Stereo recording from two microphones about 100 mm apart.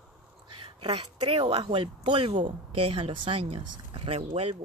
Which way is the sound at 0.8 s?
65° right (ahead or behind).